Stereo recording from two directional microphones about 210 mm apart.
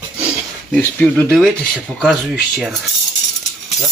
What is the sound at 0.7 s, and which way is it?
Speech, 5° left (ahead or behind).